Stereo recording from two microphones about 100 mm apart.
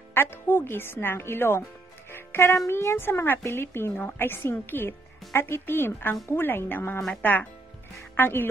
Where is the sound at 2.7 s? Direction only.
25° left (ahead or behind).